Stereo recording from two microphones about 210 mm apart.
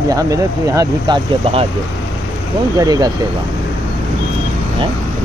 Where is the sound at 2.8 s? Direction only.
20° right (ahead or behind).